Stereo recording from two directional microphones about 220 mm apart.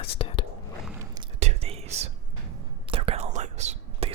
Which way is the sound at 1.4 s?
30° right (ahead or behind).